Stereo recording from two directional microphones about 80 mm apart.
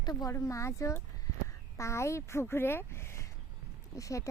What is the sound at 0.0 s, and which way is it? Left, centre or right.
Speech, left.